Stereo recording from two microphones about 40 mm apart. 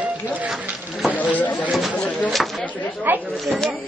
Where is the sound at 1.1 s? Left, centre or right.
Left.